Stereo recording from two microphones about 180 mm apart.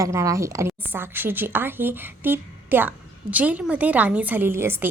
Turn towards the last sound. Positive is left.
turn(degrees=-10)  # may be behind; listen again after turning